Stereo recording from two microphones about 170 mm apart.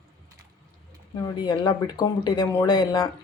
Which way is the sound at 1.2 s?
25° left (ahead or behind).